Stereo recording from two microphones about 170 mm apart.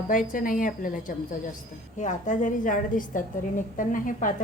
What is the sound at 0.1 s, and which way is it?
A woman's voice, 55° left (ahead or behind).